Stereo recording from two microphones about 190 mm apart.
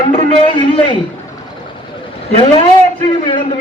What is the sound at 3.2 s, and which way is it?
Speech, 25° left (ahead or behind).